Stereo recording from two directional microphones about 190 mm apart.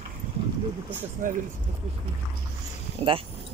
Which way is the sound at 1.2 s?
45° right (ahead or behind).